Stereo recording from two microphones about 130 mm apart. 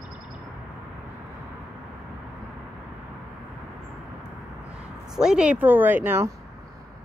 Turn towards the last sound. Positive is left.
turn(degrees=-15)  # may be behind; listen again after turning